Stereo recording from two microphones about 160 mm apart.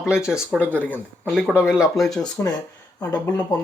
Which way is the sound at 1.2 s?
5° right (ahead or behind).